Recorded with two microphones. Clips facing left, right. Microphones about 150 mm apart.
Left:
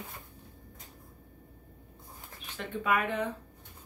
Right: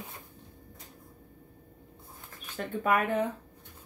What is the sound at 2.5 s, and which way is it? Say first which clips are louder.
Speech: right 2 dB; 45° right (ahead or behind).